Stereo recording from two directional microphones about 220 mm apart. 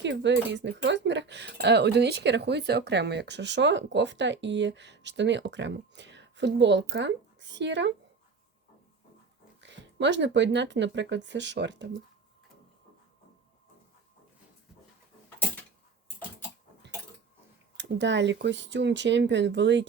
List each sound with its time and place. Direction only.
0.0 s speech: 55° right (ahead or behind)
9.6 s speech: 55° right (ahead or behind)
17.7 s speech: 55° right (ahead or behind)